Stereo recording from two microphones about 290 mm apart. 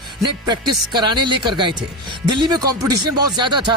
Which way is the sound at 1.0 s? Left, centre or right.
Centre.